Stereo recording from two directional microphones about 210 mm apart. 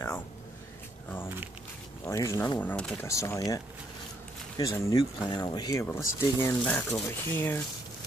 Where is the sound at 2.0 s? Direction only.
15° left (ahead or behind).